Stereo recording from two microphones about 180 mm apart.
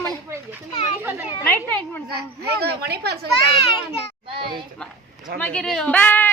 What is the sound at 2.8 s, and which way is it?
Speech, 60° right (ahead or behind).